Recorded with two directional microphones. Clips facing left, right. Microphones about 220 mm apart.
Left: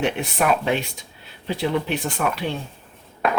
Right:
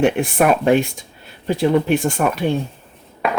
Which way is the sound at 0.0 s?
50° right (ahead or behind).